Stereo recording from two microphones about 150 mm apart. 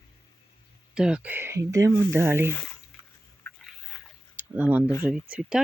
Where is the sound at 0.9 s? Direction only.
5° right (ahead or behind).